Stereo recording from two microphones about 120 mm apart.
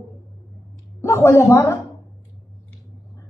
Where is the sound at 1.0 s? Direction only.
25° left (ahead or behind).